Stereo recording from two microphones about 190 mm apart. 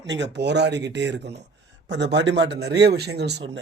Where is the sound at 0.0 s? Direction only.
70° right (ahead or behind).